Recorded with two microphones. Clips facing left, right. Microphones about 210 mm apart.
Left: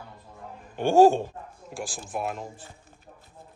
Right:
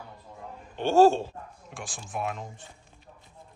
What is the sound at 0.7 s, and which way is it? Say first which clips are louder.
Speech: left 2 dB; 15° left (ahead or behind).